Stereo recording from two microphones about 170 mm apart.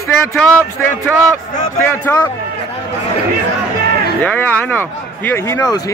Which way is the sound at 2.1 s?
15° left (ahead or behind).